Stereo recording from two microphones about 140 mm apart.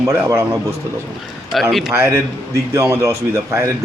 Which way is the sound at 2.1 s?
20° right (ahead or behind).